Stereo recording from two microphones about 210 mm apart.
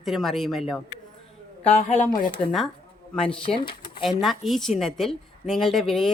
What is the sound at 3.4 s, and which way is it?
Speech, 25° left (ahead or behind).